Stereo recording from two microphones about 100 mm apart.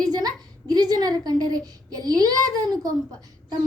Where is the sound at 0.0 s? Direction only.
40° right (ahead or behind).